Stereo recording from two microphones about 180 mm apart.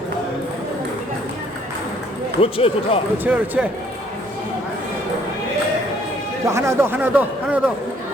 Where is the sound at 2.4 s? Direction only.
30° left (ahead or behind).